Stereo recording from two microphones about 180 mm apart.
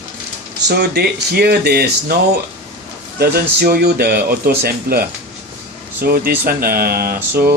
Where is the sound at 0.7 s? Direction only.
60° right (ahead or behind).